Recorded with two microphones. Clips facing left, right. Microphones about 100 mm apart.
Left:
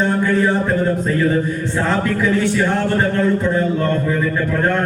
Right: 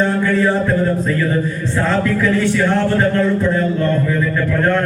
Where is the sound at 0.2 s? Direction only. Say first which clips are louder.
Right 1 dB; 20° left (ahead or behind).